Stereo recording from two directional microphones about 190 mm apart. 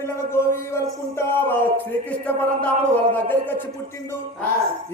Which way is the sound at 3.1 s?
10° left (ahead or behind).